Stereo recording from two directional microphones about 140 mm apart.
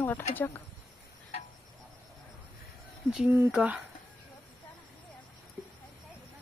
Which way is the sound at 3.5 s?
10° right (ahead or behind).